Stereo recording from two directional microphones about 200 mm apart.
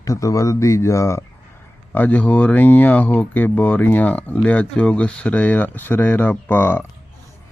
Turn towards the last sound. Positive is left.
turn(degrees=10)  # may be behind; listen again after turning